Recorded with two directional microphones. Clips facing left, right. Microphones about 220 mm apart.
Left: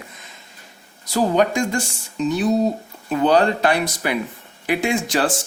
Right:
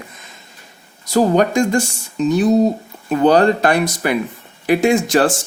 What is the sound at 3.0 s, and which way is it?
Speech, 45° right (ahead or behind).